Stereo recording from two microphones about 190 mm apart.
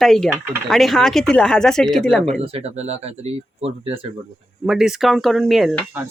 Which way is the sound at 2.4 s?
30° right (ahead or behind).